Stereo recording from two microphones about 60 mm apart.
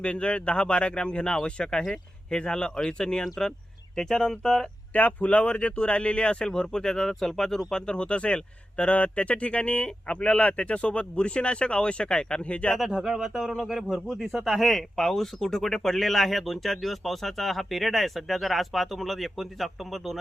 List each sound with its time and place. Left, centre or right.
0.0 s speech: centre
4.9 s speech: left
12.7 s speech: centre